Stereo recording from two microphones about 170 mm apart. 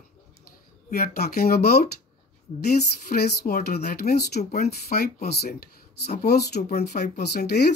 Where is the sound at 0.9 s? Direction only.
65° left (ahead or behind).